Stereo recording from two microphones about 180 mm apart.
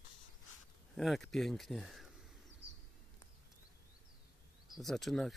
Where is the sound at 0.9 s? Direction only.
Centre (ahead or behind).